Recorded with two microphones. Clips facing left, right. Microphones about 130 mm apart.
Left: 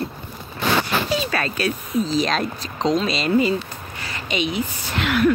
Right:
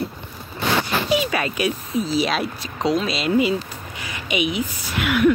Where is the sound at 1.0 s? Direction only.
15° right (ahead or behind).